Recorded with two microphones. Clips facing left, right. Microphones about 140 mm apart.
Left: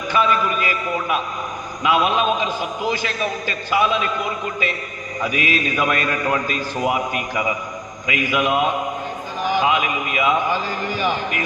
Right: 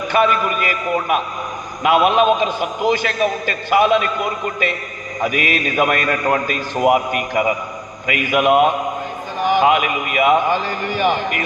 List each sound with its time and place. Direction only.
0.1 s a man's voice: 55° right (ahead or behind)
5.2 s a man's voice: 50° right (ahead or behind)